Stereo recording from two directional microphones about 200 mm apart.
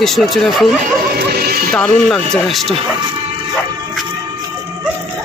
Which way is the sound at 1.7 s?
5° left (ahead or behind).